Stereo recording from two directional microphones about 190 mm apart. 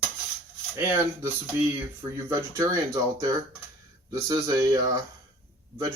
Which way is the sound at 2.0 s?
15° right (ahead or behind).